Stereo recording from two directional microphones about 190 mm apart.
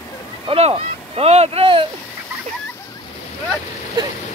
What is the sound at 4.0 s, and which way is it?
Speech, 20° right (ahead or behind).